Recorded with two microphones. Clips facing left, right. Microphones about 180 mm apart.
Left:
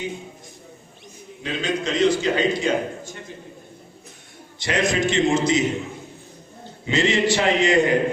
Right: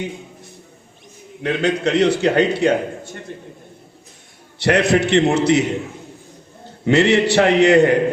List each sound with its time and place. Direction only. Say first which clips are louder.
1.4 s a man's voice: right 6 dB; 65° right (ahead or behind)
4.6 s a man's voice: right 6 dB; 65° right (ahead or behind)
6.8 s a man's voice: right 6 dB; 65° right (ahead or behind)